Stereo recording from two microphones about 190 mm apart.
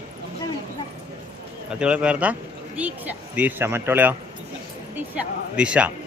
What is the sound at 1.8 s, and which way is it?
Speech, 5° right (ahead or behind).